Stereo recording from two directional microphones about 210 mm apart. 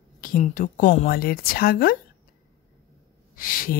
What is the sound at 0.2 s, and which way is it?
Speech, 40° left (ahead or behind).